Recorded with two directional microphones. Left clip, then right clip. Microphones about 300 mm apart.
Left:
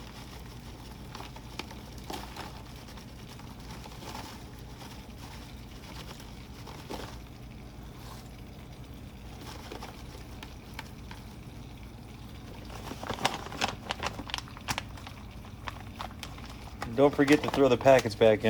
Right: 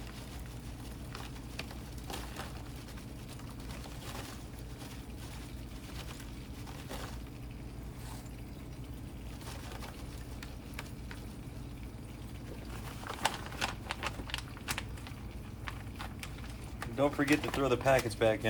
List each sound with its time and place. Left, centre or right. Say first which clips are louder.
13.1 s a sound: left 4 dB; left
15.6 s clip-clop: left 5 dB; left
16.8 s speech: left 7 dB; left